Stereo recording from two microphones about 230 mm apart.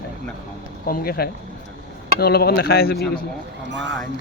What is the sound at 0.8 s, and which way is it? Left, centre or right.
Speech, left.